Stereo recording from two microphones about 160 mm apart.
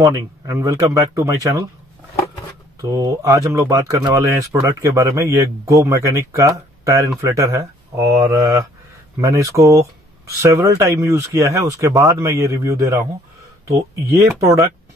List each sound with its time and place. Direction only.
0.0 s speech: 20° right (ahead or behind)
2.8 s speech: 20° right (ahead or behind)
14.4 s speech: 20° right (ahead or behind)